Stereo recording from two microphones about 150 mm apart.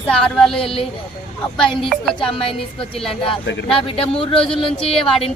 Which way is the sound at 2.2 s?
35° left (ahead or behind).